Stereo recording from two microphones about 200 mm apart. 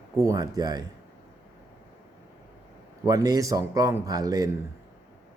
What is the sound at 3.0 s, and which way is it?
A man's voice, 20° right (ahead or behind).